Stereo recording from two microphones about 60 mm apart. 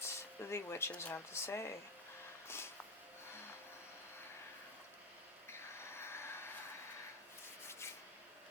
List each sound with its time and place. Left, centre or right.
0.0 s a sound: left
1.0 s speech: left
5.5 s vehicle: left